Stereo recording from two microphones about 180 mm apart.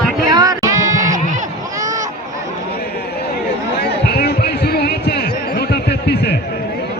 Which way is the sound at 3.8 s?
65° left (ahead or behind).